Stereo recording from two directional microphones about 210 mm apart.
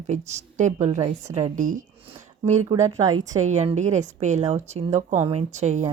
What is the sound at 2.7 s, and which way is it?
Speech, 15° right (ahead or behind).